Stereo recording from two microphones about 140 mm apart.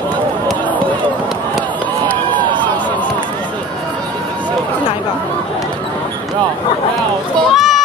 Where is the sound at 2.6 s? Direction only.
10° left (ahead or behind).